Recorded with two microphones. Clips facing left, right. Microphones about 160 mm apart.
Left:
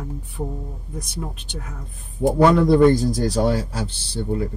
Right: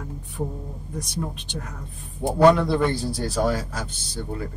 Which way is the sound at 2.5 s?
45° left (ahead or behind).